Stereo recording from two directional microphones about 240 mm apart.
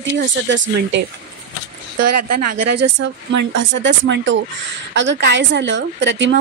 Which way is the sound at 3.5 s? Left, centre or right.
Right.